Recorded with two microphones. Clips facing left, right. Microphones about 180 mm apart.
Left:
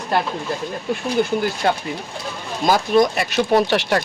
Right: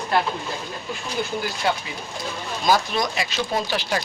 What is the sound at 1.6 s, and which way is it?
Speech, 50° left (ahead or behind).